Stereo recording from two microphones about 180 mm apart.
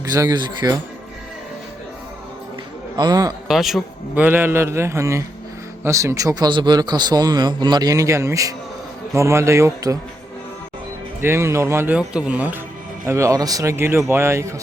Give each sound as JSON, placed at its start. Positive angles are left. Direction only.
{"t": 0.0, "sound": "a man's voice", "side_deg": -20}
{"t": 2.9, "sound": "a man's voice", "side_deg": -20}
{"t": 3.5, "sound": "a man's voice", "side_deg": 0}
{"t": 11.2, "sound": "a man's voice", "side_deg": -15}